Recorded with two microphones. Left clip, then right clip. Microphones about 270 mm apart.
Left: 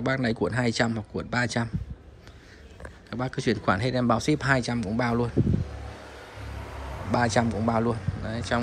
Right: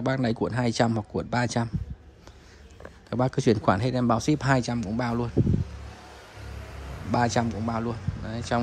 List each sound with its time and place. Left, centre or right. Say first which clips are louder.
0.0 s speech: even; centre
3.1 s speech: right 4 dB; right
7.1 s speech: left 1 dB; centre